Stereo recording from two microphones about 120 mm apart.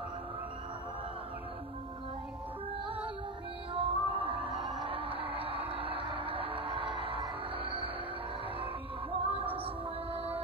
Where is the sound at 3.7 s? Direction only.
50° right (ahead or behind).